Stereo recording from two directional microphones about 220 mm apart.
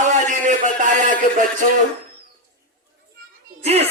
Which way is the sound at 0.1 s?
35° right (ahead or behind).